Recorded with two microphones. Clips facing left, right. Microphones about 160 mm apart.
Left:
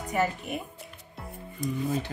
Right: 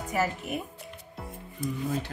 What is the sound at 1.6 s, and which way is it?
Speech, 5° right (ahead or behind).